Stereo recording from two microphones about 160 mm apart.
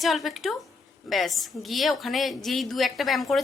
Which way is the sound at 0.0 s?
Centre (ahead or behind).